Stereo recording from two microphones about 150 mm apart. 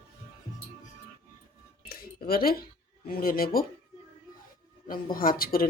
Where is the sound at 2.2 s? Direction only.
80° left.